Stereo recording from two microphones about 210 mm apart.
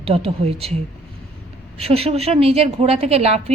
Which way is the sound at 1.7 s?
30° right (ahead or behind).